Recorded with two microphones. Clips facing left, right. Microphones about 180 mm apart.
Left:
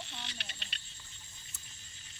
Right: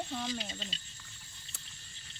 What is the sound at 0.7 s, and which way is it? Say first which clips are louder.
Speech: right 3 dB; 65° left (ahead or behind).